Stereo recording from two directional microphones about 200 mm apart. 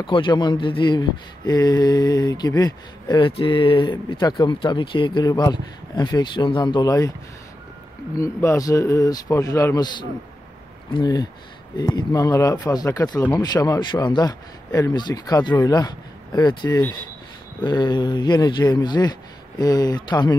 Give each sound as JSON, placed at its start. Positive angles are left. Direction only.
{"t": 0.0, "sound": "speech", "side_deg": 25}
{"t": 8.2, "sound": "a man's voice", "side_deg": 15}